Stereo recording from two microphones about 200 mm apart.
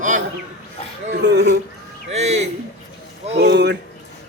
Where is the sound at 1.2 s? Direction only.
55° right (ahead or behind).